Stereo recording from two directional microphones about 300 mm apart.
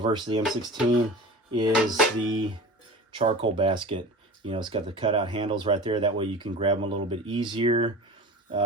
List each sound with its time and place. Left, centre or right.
0.0 s speech: centre
1.5 s speech: centre